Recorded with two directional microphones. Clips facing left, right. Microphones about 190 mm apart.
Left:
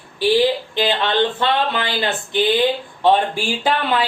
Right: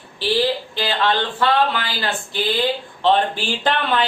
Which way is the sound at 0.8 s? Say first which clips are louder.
Left 3 dB; 20° left (ahead or behind).